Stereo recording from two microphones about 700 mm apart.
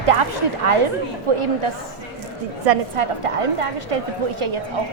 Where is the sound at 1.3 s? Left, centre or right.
Right.